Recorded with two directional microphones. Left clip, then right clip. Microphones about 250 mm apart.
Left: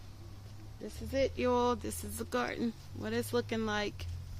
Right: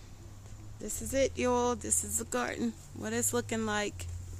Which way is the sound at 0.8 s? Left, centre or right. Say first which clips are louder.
Right 3 dB; right.